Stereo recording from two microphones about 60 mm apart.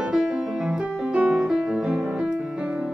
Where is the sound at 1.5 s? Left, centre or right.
Centre.